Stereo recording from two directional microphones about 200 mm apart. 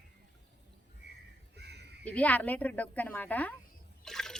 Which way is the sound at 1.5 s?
55° right (ahead or behind).